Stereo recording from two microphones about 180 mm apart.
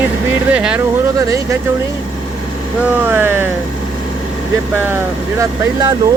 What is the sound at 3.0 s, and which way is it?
Speech, 10° right (ahead or behind).